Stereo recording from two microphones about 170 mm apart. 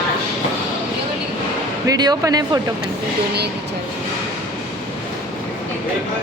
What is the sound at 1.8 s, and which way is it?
Speech, 25° right (ahead or behind).